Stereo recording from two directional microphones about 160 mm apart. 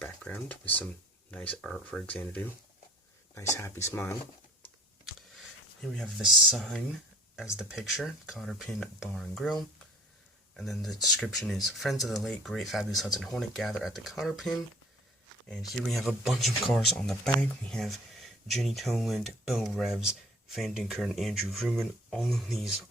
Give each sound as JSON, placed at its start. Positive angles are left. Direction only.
{"t": 0.0, "sound": "speech", "side_deg": 10}
{"t": 3.5, "sound": "speech", "side_deg": 15}
{"t": 6.0, "sound": "speech", "side_deg": 0}